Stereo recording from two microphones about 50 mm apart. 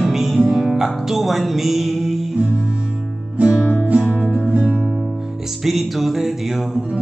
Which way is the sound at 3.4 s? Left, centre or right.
Right.